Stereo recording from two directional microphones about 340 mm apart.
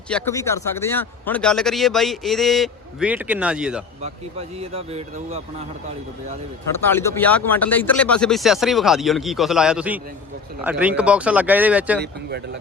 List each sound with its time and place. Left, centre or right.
0.1 s a man's voice: centre
4.0 s speech: centre
6.8 s a man's voice: centre